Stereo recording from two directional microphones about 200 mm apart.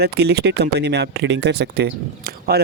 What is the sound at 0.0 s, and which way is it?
Speech, 55° right (ahead or behind).